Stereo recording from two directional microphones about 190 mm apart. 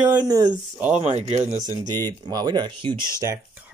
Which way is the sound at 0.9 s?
35° right (ahead or behind).